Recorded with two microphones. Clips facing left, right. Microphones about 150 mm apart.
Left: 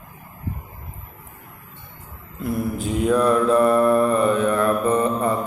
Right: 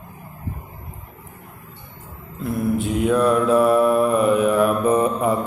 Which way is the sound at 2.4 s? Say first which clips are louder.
Right 3 dB; centre (ahead or behind).